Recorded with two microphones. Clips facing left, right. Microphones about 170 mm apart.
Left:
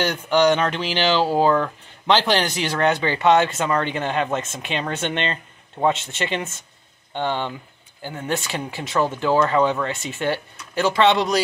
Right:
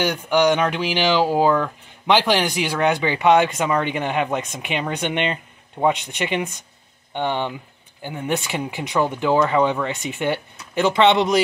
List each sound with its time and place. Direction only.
0.0 s speech: 10° right (ahead or behind)